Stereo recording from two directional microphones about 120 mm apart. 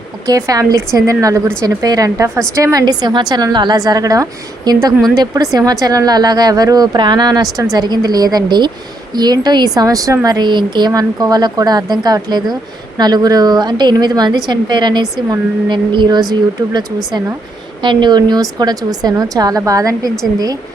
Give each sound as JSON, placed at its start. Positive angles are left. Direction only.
{"t": 0.3, "sound": "a woman's voice", "side_deg": -30}
{"t": 17.8, "sound": "speech", "side_deg": -40}